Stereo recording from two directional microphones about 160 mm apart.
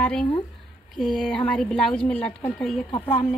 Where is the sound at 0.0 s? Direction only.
10° left (ahead or behind).